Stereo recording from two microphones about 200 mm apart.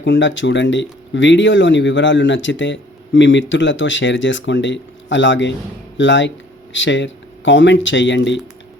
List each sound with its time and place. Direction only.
0.0 s speech: 65° left (ahead or behind)